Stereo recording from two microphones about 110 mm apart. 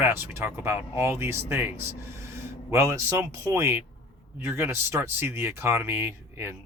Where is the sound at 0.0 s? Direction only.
20° right (ahead or behind).